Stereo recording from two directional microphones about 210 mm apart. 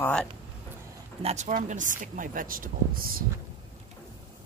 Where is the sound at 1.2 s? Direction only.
35° right (ahead or behind).